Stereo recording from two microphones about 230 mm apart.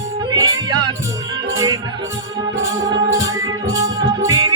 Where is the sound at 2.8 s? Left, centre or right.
Centre.